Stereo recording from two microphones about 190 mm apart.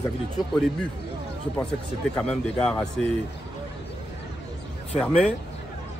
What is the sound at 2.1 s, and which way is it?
Speech, 5° left (ahead or behind).